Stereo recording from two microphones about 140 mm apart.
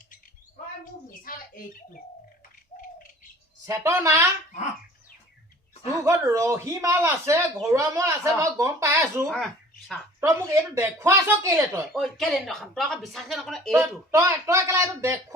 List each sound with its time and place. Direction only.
2.7 s bird: 60° left (ahead or behind)
3.7 s speech: 20° right (ahead or behind)
6.0 s speech: 20° right (ahead or behind)
9.2 s speech: centre (ahead or behind)
10.2 s speech: 20° right (ahead or behind)
11.9 s speech: centre (ahead or behind)
14.1 s speech: 20° right (ahead or behind)